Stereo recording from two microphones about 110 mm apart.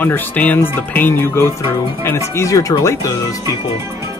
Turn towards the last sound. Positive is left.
turn(degrees=30)  # may be behind; listen again after turning